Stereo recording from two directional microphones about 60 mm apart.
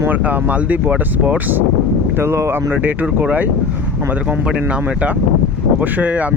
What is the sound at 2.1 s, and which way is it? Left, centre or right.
Speech, right.